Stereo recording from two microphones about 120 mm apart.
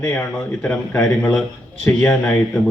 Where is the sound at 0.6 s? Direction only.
15° left (ahead or behind).